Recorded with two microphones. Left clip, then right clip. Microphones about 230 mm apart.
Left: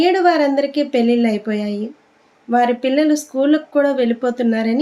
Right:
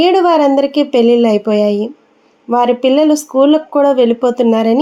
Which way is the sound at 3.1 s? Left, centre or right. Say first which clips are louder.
Right 7 dB; centre.